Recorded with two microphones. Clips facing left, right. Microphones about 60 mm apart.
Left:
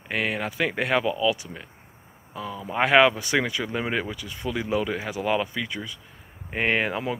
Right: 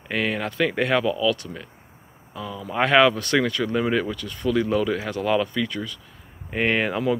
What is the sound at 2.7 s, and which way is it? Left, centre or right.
Speech, centre.